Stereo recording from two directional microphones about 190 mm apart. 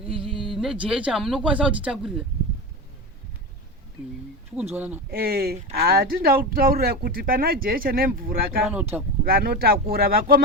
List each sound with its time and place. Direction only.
0.3 s speech: centre (ahead or behind)
4.7 s speech: 10° right (ahead or behind)
5.1 s speech: 55° right (ahead or behind)
8.7 s speech: 10° right (ahead or behind)
9.2 s speech: 50° right (ahead or behind)